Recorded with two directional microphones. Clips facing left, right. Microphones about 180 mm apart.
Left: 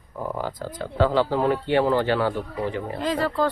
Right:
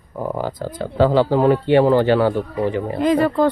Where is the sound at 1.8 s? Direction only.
35° right (ahead or behind).